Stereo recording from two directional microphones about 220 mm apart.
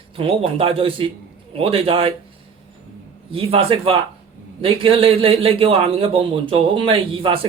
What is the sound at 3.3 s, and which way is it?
A man's voice, 25° right (ahead or behind).